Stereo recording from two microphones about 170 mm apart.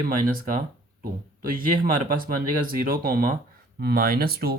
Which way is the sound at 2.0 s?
55° right (ahead or behind).